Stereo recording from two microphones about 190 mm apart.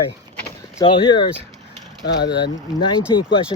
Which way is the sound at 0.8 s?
25° left (ahead or behind).